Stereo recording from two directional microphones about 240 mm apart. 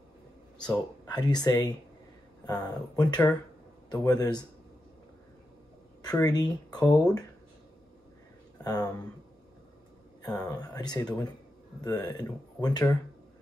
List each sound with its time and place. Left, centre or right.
0.7 s speech: centre
6.0 s speech: centre
8.6 s speech: centre
10.5 s speech: centre